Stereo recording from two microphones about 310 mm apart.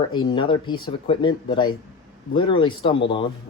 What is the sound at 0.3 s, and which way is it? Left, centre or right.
Speech, centre.